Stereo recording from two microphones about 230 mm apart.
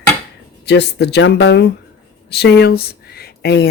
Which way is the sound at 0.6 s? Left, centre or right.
Left.